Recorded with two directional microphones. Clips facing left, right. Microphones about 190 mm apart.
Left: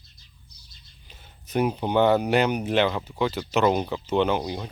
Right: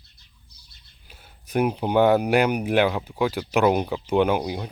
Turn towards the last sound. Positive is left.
turn(degrees=-10)  # may be behind; listen again after turning